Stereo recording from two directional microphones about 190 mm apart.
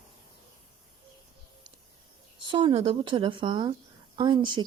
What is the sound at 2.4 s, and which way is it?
Speech, 25° right (ahead or behind).